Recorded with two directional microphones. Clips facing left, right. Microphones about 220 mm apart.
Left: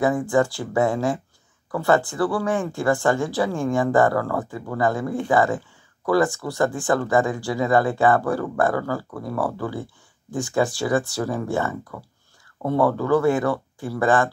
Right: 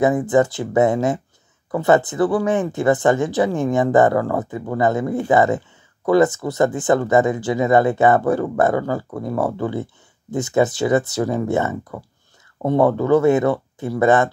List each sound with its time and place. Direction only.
0.0 s speech: 20° right (ahead or behind)